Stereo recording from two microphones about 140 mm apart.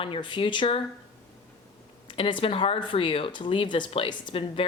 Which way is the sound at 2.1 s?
35° left (ahead or behind).